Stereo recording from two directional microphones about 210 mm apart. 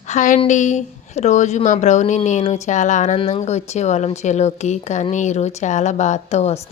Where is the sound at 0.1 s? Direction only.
35° left (ahead or behind).